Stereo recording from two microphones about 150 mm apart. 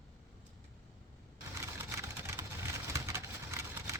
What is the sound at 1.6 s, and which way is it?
Vehicle, 20° right (ahead or behind).